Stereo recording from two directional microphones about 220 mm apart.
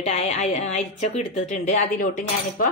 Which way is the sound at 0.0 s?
30° left (ahead or behind).